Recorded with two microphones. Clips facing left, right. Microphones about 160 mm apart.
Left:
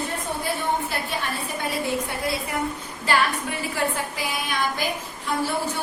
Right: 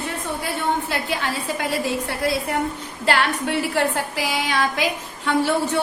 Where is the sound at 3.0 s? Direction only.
75° right (ahead or behind).